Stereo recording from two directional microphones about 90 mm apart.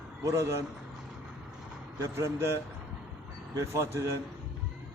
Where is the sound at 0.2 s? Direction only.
35° right (ahead or behind).